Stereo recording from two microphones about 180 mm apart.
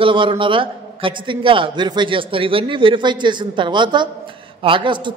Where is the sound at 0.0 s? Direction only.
30° right (ahead or behind).